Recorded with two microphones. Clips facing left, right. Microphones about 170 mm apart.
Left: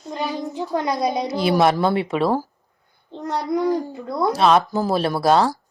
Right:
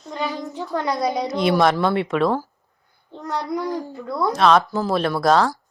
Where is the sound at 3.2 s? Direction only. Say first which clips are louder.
Left 4 dB; 20° left (ahead or behind).